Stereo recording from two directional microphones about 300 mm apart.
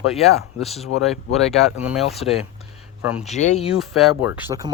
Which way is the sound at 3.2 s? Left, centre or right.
Left.